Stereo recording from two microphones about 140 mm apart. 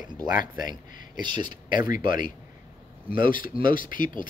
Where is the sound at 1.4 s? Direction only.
80° left.